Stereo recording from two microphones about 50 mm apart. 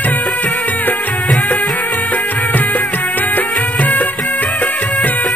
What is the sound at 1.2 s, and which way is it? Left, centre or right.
Music of bollywood, centre.